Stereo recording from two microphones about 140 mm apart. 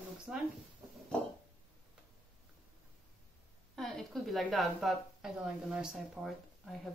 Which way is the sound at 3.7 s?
Centre (ahead or behind).